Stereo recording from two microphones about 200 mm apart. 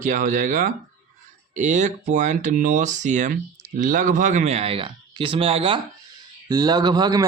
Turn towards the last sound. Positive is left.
turn(degrees=-20)  # may be behind; listen again after turning